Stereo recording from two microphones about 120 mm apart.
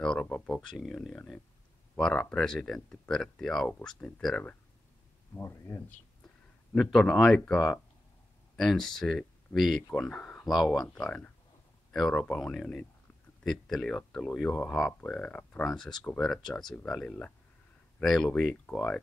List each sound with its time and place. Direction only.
0.0 s speech: 10° left (ahead or behind)
5.3 s speech: 20° left (ahead or behind)
6.7 s speech: 5° left (ahead or behind)